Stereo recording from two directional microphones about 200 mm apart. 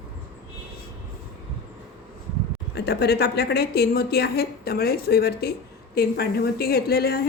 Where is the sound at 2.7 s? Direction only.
55° left (ahead or behind).